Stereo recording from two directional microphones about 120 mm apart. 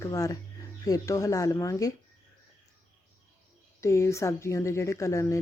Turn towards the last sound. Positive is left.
turn(degrees=25)  # may be behind; listen again after turning